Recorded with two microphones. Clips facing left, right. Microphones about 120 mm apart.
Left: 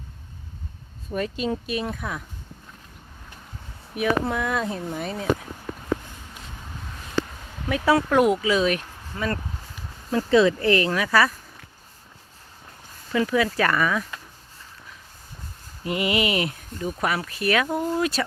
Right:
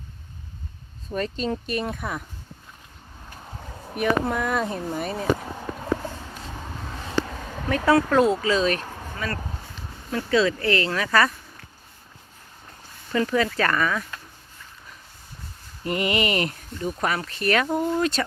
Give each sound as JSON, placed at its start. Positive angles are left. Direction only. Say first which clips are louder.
{"t": 1.1, "sound": "speech", "louder": "even", "side_deg": 10}
{"t": 3.9, "sound": "speech", "louder": "even", "side_deg": 0}
{"t": 7.3, "sound": "a sound", "louder": "right 7 dB", "side_deg": -90}
{"t": 7.9, "sound": "speech", "louder": "even", "side_deg": 15}
{"t": 9.1, "sound": "speech", "louder": "left 4 dB", "side_deg": 20}
{"t": 13.1, "sound": "speech", "louder": "left 1 dB", "side_deg": 5}
{"t": 15.8, "sound": "speech", "louder": "even", "side_deg": 10}